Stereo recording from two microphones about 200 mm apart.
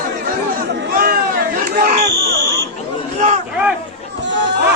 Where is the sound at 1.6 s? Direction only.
50° right (ahead or behind).